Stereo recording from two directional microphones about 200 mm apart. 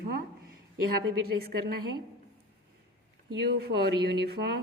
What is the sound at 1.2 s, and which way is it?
Speech, 50° right (ahead or behind).